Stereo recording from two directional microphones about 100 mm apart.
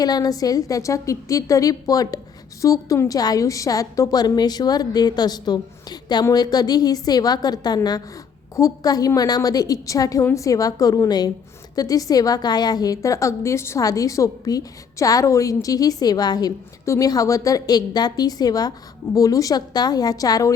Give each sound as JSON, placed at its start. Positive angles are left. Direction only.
{"t": 0.0, "sound": "a woman's voice", "side_deg": 40}